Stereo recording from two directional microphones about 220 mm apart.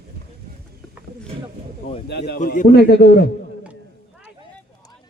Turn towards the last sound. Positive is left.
turn(degrees=45)  # may be behind; listen again after turning